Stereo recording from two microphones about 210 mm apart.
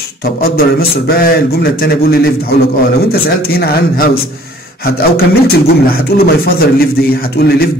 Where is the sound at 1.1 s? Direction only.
45° left (ahead or behind).